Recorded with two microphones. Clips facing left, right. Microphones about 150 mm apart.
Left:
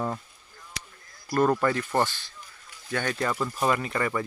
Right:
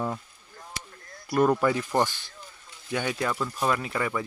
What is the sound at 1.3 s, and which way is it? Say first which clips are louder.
Speech: right 1 dB; 10° right (ahead or behind).